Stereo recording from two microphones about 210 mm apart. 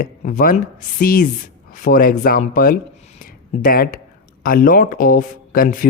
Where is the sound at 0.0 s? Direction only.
40° left (ahead or behind).